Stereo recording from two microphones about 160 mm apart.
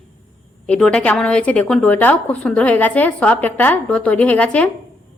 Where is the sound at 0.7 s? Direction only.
5° left (ahead or behind).